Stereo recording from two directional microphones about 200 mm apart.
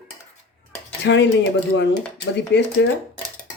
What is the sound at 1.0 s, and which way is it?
Speech, 60° left (ahead or behind).